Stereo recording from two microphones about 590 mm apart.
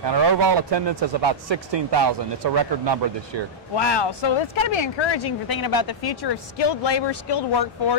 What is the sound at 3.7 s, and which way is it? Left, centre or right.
Speech, left.